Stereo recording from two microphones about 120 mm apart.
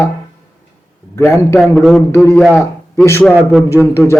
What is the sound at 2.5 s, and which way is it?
Speech, centre (ahead or behind).